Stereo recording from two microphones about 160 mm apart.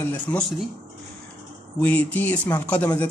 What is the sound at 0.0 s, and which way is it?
Speech, 10° left (ahead or behind).